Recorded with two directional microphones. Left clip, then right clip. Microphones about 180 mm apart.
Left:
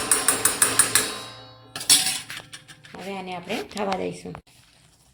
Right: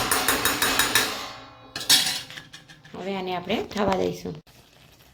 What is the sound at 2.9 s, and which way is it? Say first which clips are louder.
Speech: right 4 dB; centre (ahead or behind).